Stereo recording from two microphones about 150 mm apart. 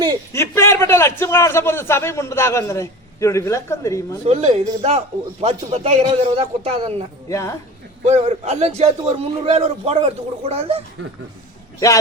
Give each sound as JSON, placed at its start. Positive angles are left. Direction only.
{"t": 0.3, "sound": "a man's voice", "side_deg": 20}
{"t": 4.3, "sound": "a man's voice", "side_deg": -45}
{"t": 7.3, "sound": "a man's voice", "side_deg": 20}
{"t": 8.0, "sound": "a man's voice", "side_deg": -50}